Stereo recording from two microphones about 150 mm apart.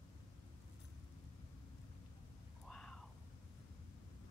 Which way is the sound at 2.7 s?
5° left (ahead or behind).